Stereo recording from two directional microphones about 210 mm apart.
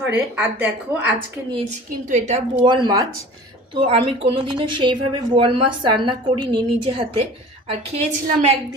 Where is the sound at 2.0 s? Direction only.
35° right (ahead or behind).